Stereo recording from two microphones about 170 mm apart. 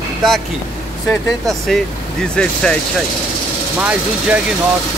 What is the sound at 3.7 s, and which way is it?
Speech, 10° right (ahead or behind).